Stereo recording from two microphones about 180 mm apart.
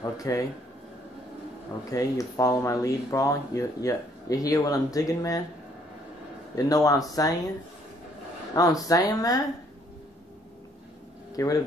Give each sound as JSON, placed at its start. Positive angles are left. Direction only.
{"t": 0.0, "sound": "a sound", "side_deg": 20}
{"t": 1.9, "sound": "speech", "side_deg": 20}
{"t": 6.5, "sound": "speech", "side_deg": 20}
{"t": 8.5, "sound": "speech", "side_deg": 20}
{"t": 11.3, "sound": "speech", "side_deg": 20}